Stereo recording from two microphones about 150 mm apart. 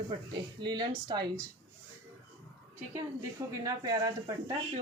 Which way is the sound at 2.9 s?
20° right (ahead or behind).